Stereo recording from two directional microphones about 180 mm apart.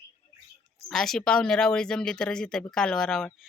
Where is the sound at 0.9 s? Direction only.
Centre (ahead or behind).